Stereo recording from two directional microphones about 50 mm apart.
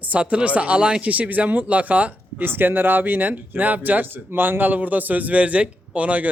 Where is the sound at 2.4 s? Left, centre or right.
Right.